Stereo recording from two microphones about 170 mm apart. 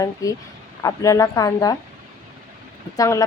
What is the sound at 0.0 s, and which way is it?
A woman's voice, 20° left (ahead or behind).